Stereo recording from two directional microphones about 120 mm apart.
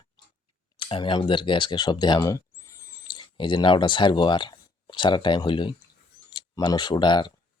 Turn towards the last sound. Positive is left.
turn(degrees=40)  # may be behind; listen again after turning